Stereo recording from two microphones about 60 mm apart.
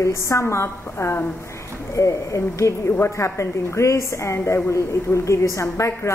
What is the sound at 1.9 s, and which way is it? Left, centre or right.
A woman's voice, left.